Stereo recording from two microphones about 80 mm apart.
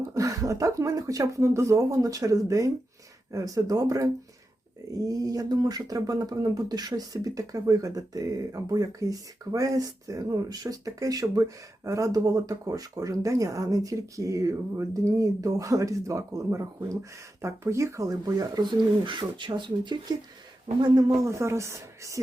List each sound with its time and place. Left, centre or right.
0.0 s speech: right
19.0 s speech: right
20.8 s speech: right